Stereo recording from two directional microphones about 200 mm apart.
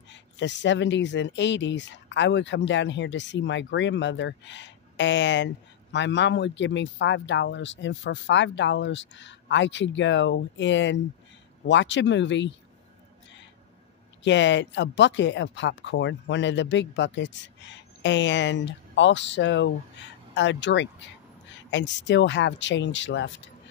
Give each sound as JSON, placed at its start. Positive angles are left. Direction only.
{"t": 0.1, "sound": "speech", "side_deg": 65}
{"t": 14.2, "sound": "speech", "side_deg": 65}